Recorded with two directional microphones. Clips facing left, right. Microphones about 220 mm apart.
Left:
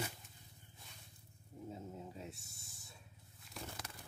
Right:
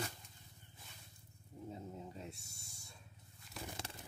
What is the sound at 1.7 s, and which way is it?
Snake, centre (ahead or behind).